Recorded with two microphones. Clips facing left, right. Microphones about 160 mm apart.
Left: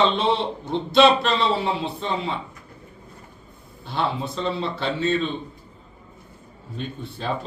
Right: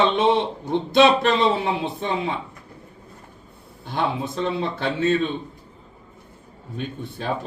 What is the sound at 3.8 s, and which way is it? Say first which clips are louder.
A man's voice: right 1 dB; 55° right (ahead or behind).